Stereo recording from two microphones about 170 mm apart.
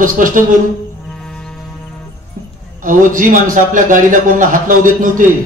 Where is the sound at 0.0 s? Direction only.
50° right (ahead or behind).